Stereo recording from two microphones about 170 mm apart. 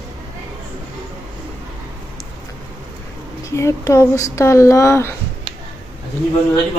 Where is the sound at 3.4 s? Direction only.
15° left (ahead or behind).